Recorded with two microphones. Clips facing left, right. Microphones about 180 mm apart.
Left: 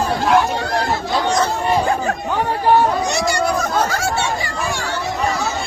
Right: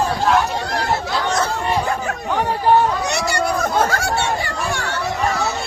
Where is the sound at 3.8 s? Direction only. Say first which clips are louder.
Right 1 dB; 60° right (ahead or behind).